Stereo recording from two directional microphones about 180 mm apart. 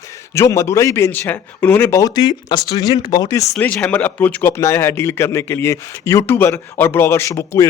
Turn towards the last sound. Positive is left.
turn(degrees=15)  # may be behind; listen again after turning